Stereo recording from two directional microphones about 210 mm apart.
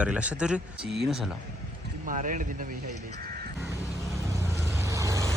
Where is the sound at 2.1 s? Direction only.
40° right (ahead or behind).